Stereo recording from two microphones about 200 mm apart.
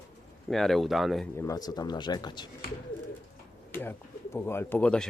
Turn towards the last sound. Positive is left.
turn(degrees=5)  # may be behind; listen again after turning